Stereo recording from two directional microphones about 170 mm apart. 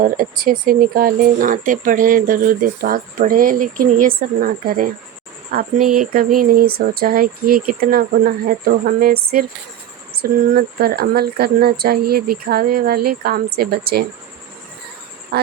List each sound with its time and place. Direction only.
0.0 s speech: 55° right (ahead or behind)
15.3 s speech: 70° right (ahead or behind)